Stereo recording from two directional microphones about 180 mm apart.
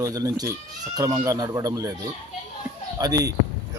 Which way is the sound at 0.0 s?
20° right (ahead or behind).